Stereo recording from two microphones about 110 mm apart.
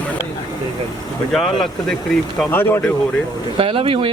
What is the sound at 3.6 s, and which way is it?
Speech, 55° right (ahead or behind).